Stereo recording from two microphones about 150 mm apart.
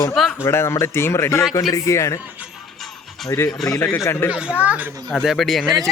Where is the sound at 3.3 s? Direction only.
15° left (ahead or behind).